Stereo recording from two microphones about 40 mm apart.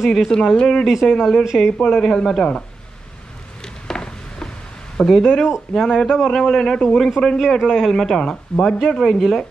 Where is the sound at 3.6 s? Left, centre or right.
Centre.